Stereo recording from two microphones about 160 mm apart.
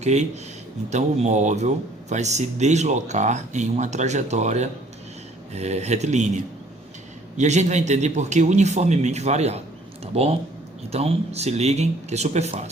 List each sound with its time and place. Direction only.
0.0 s speech: 45° right (ahead or behind)